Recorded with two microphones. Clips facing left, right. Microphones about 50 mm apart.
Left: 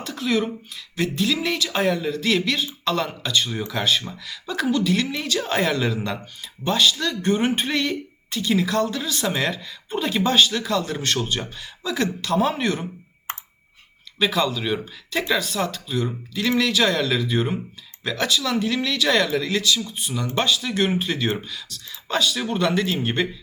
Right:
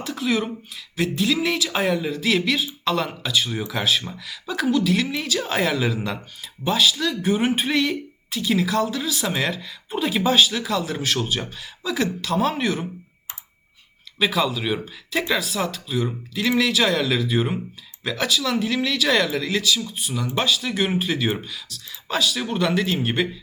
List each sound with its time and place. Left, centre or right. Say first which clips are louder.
0.0 s speech: even; centre
13.3 s a sound: left 9 dB; left
14.2 s speech: even; centre